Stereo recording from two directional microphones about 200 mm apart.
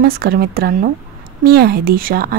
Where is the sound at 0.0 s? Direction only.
50° right (ahead or behind).